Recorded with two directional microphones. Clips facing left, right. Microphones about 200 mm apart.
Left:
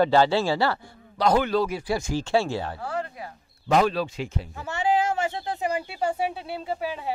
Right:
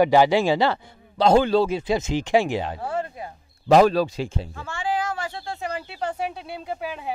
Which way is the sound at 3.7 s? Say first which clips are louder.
Right 6 dB; 40° right (ahead or behind).